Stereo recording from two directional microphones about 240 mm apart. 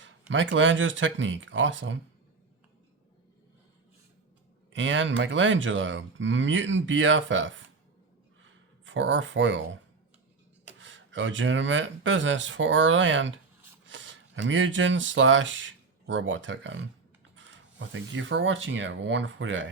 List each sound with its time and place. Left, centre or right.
0.0 s speech: right
4.7 s speech: right
8.4 s a sound: right
10.8 s speech: right